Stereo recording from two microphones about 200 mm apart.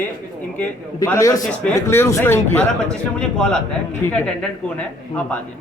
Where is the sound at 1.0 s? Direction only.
15° left (ahead or behind).